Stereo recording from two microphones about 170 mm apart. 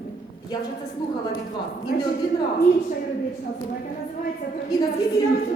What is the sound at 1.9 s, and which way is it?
Speech, 55° left (ahead or behind).